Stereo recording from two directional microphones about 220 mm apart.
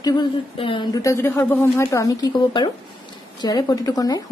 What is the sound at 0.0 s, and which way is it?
Speech, 20° left (ahead or behind).